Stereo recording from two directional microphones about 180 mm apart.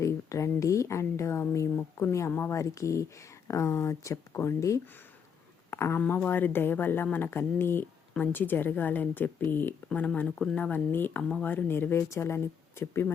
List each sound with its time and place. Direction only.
0.0 s a woman's voice: 15° left (ahead or behind)